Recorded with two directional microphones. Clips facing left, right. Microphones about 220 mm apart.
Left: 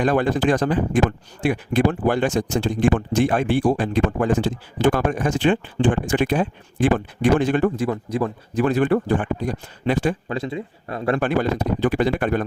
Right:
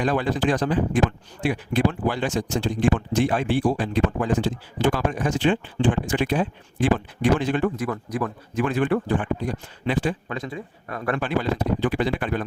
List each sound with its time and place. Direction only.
0.0 s speech: 50° left (ahead or behind)
7.8 s a man's voice: 25° left (ahead or behind); by 10.2 s 45° left (ahead or behind)
10.2 s speech: 30° left (ahead or behind)
11.2 s speech: 50° left (ahead or behind)